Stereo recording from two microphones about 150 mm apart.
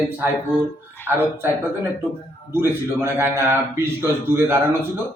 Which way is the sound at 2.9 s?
15° right (ahead or behind).